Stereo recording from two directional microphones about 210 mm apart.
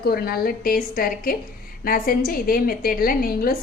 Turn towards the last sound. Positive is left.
turn(degrees=45)  # may be behind; listen again after turning